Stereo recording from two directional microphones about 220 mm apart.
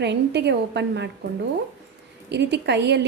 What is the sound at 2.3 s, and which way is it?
Speech, 50° right (ahead or behind).